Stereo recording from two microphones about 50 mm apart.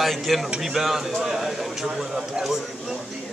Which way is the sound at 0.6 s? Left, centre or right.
Centre.